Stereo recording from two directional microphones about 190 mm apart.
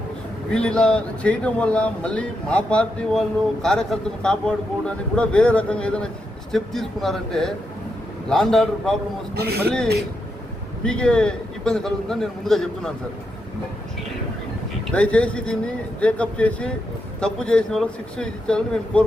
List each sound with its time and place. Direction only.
0.5 s speech: 5° left (ahead or behind)
9.3 s a man's voice: 55° right (ahead or behind)
9.6 s speech: 5° left (ahead or behind)
14.9 s speech: 5° left (ahead or behind)